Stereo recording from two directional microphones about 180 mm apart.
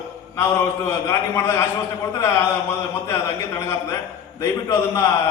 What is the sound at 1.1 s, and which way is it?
Speech, 15° left (ahead or behind).